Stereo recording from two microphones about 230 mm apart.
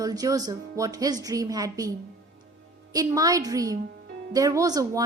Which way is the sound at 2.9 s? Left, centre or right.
Centre.